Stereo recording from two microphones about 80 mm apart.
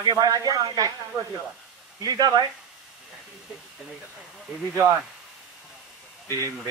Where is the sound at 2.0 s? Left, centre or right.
Right.